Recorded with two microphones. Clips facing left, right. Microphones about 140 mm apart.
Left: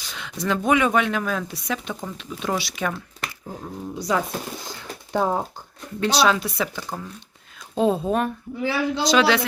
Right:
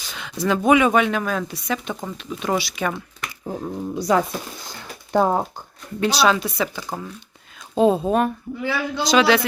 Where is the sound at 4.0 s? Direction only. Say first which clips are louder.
Right 4 dB; 45° right (ahead or behind).